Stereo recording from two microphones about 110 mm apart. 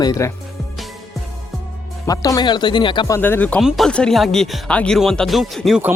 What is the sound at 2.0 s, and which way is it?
Speech, 35° left (ahead or behind).